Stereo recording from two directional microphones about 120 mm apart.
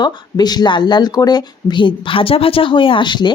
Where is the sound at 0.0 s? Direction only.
35° left (ahead or behind).